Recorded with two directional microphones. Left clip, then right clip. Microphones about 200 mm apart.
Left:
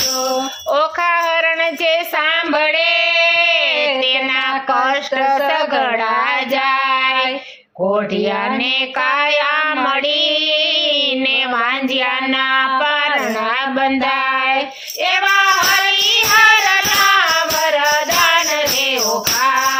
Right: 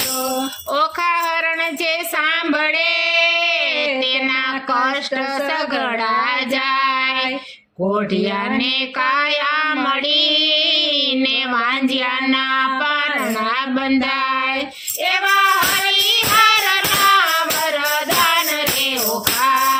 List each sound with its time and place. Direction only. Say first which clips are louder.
0.7 s jingle bell: left 3 dB; 50° right (ahead or behind)
6.7 s child singing: left 2 dB; 50° right (ahead or behind)
9.0 s child singing: left 2 dB; 50° right (ahead or behind)
10.2 s music: even; 20° right (ahead or behind)
16.1 s child singing: left 5 dB; 50° right (ahead or behind)
19.4 s music: even; 50° right (ahead or behind)